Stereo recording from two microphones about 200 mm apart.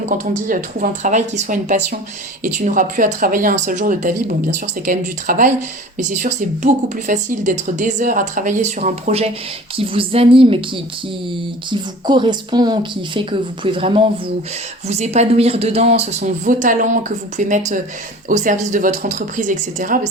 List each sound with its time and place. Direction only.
0.1 s a woman's voice: 45° right (ahead or behind); by 10.6 s 25° right (ahead or behind)
11.7 s a woman's voice: 25° right (ahead or behind); by 20.0 s 40° right (ahead or behind)